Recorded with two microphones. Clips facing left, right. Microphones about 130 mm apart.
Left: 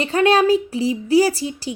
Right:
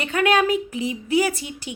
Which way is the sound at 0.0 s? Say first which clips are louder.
Left 4 dB; 30° left (ahead or behind).